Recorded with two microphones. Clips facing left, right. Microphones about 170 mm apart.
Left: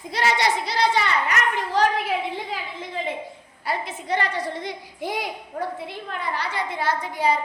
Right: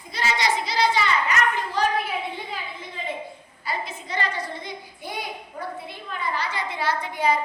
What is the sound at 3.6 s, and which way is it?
A child's voice, 70° left (ahead or behind).